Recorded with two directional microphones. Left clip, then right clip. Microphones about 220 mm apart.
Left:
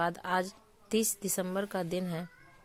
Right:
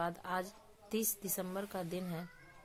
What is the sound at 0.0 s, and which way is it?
Speech, 30° left (ahead or behind).